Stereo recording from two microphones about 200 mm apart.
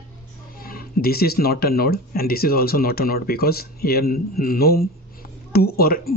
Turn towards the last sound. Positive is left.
turn(degrees=50)  # may be behind; listen again after turning